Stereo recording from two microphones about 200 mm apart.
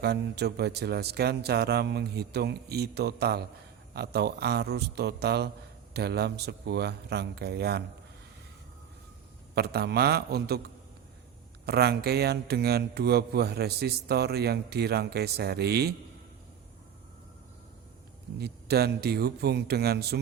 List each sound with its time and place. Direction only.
0.0 s a man's voice: 55° right (ahead or behind)
9.6 s a man's voice: 55° right (ahead or behind)
11.6 s a man's voice: 55° right (ahead or behind)
18.3 s a man's voice: 55° right (ahead or behind)